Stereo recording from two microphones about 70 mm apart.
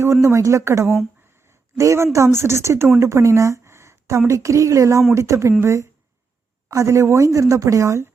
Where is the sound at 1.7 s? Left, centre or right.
Right.